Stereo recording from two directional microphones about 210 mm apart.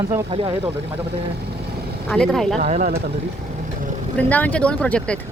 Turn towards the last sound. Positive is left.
turn(degrees=5)  # may be behind; listen again after turning